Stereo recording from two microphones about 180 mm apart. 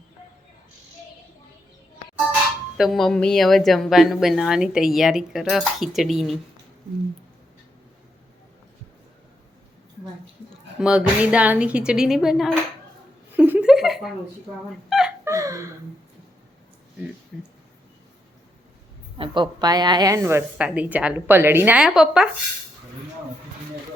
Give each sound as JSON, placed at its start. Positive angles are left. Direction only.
{"t": 2.7, "sound": "a woman's voice", "side_deg": 0}
{"t": 10.8, "sound": "a woman's voice", "side_deg": -5}
{"t": 13.3, "sound": "a sound", "side_deg": -10}
{"t": 14.8, "sound": "dog", "side_deg": 0}
{"t": 15.2, "sound": "a sound", "side_deg": -15}
{"t": 19.2, "sound": "a woman's voice", "side_deg": -25}